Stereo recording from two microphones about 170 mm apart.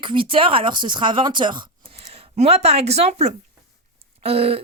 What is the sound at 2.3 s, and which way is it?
A woman's voice, 40° right (ahead or behind).